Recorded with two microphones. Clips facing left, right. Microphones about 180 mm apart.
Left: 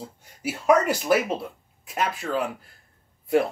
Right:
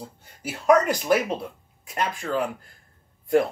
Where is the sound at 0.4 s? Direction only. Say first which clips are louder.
Right 1 dB; 10° left (ahead or behind).